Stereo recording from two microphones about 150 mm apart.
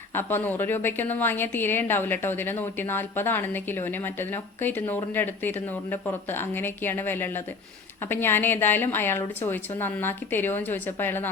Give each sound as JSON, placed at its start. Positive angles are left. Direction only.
{"t": 0.1, "sound": "a woman's voice", "side_deg": 15}